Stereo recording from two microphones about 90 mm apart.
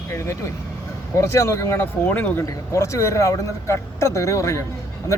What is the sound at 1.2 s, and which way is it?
Speech, 30° left (ahead or behind).